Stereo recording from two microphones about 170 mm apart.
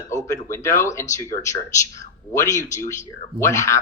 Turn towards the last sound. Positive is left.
turn(degrees=15)  # may be behind; listen again after turning